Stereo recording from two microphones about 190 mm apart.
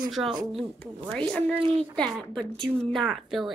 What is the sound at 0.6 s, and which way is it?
A woman's voice, 5° left (ahead or behind).